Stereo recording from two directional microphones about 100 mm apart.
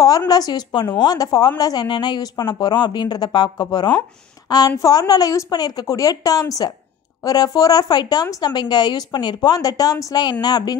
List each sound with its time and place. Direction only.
0.3 s speech: 40° left (ahead or behind)